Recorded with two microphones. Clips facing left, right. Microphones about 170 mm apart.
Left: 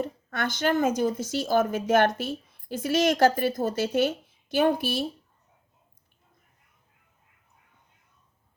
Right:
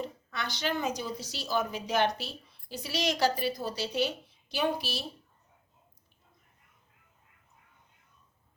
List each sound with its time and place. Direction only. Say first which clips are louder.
0.0 s speech: left 7 dB; 50° left (ahead or behind)